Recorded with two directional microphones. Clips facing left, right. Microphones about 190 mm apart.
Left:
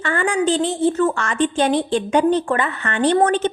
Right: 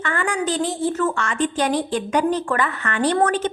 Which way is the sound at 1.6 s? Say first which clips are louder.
Left 4 dB; 25° left (ahead or behind).